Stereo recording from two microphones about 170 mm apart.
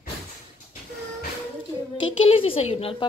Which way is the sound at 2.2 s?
35° left (ahead or behind).